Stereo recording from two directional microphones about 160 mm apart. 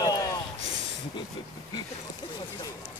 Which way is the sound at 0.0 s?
20° left (ahead or behind).